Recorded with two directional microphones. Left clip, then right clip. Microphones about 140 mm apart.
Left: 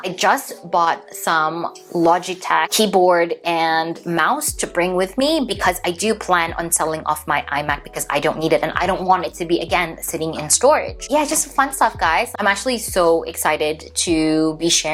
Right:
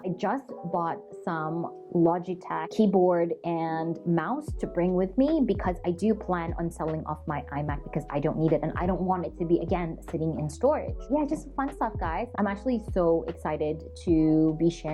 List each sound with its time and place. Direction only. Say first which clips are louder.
0.0 s speech: left 13 dB; 15° left (ahead or behind)
1.6 s speech: left 9 dB; 45° left (ahead or behind)
2.1 s speech: left 13 dB; 10° left (ahead or behind)